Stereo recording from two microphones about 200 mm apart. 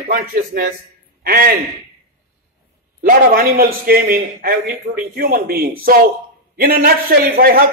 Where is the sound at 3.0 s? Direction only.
45° right (ahead or behind).